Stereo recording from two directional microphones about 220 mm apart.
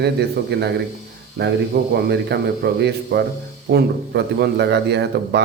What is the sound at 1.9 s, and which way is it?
Speech, 50° right (ahead or behind).